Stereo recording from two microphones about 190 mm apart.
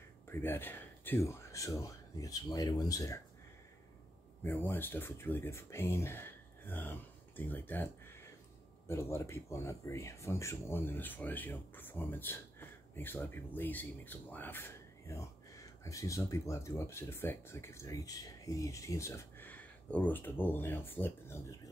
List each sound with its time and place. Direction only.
0.3 s speech: 10° left (ahead or behind)
4.4 s speech: 10° left (ahead or behind)